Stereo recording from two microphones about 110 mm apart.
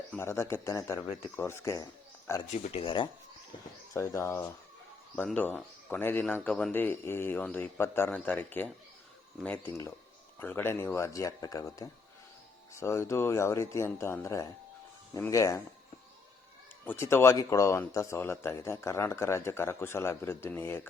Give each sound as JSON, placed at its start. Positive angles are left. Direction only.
{"t": 0.2, "sound": "speech", "side_deg": 25}
{"t": 2.7, "sound": "speech", "side_deg": 50}
{"t": 3.9, "sound": "speech", "side_deg": 25}
{"t": 10.4, "sound": "speech", "side_deg": 20}
{"t": 16.8, "sound": "speech", "side_deg": 20}